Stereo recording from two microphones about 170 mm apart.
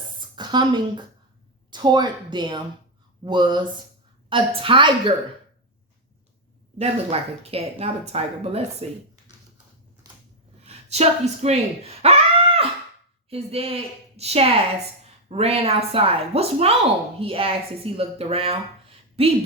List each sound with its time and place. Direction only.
0.3 s a woman's voice: 25° right (ahead or behind)
6.7 s speech: 35° right (ahead or behind)
10.8 s speech: 40° right (ahead or behind)